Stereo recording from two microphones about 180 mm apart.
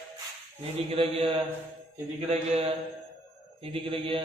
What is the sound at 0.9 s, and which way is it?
Speech, 35° right (ahead or behind).